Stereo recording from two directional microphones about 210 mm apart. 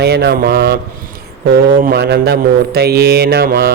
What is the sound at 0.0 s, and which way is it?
Mantra, 50° right (ahead or behind).